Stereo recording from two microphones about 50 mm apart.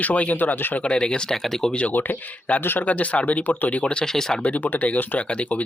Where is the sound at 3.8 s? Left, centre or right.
Centre.